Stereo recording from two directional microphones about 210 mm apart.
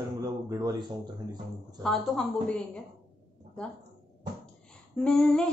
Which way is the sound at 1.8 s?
Centre (ahead or behind).